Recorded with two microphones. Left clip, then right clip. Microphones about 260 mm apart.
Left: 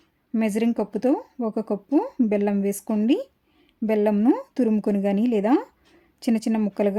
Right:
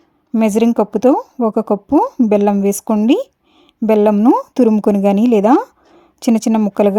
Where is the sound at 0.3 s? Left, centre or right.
Right.